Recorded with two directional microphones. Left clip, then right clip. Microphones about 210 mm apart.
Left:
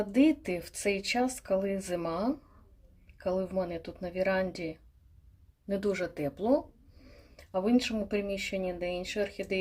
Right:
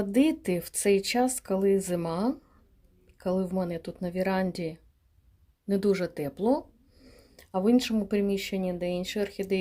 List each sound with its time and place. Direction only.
0.0 s speech: 50° right (ahead or behind)